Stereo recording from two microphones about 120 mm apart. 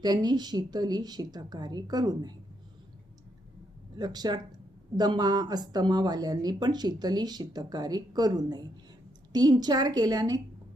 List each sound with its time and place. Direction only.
0.0 s speech: 35° right (ahead or behind)
3.9 s speech: 35° right (ahead or behind)